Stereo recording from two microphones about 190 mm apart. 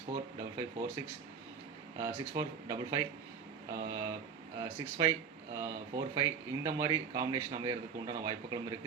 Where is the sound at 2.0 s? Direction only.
20° right (ahead or behind).